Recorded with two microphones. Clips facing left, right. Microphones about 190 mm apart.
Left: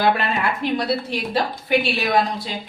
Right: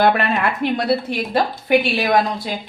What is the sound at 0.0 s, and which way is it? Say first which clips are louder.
A woman's voice: right 3 dB; 55° right (ahead or behind).